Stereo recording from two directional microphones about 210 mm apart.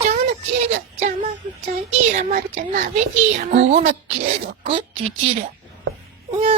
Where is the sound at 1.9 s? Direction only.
35° right (ahead or behind).